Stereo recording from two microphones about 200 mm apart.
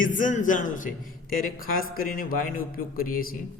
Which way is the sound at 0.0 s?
40° left (ahead or behind).